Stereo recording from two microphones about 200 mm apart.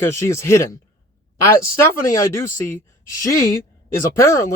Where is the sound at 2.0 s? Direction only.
15° left (ahead or behind).